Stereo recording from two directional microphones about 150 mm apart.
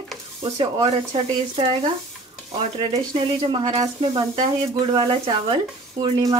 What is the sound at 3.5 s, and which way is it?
Speech, 30° right (ahead or behind).